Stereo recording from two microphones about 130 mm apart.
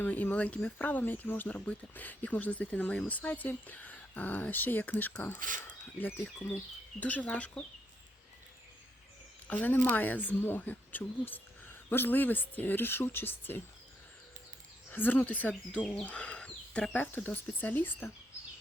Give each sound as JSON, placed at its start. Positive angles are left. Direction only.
{"t": 0.0, "sound": "speech", "side_deg": 15}
{"t": 9.5, "sound": "speech", "side_deg": 15}
{"t": 14.8, "sound": "speech", "side_deg": 15}